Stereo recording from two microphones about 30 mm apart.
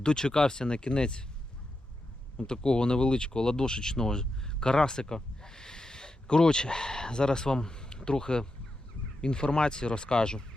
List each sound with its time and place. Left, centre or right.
0.0 s speech: left
2.4 s speech: left